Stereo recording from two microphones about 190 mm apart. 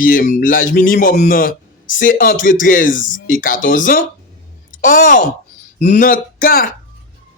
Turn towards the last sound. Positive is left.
turn(degrees=50)  # may be behind; listen again after turning